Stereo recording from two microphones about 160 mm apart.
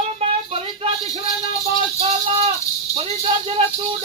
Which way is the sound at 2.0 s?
40° right (ahead or behind).